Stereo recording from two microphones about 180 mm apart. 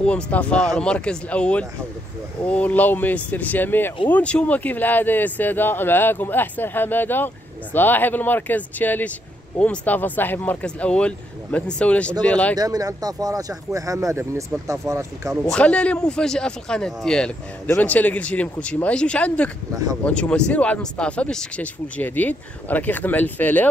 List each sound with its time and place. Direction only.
0.0 s speech: 10° left (ahead or behind)
12.5 s speech: 20° right (ahead or behind)
15.4 s speech: 5° left (ahead or behind)
19.7 s speech: 20° right (ahead or behind)
20.1 s speech: 5° left (ahead or behind)